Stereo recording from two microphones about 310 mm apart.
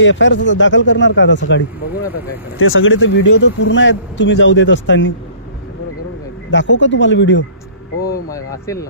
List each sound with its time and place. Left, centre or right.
0.0 s speech: left
6.5 s speech: left
8.3 s speech: centre